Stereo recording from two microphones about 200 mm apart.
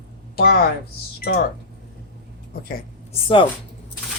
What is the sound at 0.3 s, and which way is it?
Speech, 50° left (ahead or behind).